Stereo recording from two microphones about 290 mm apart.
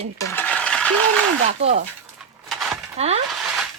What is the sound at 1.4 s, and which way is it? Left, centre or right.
Speech, right.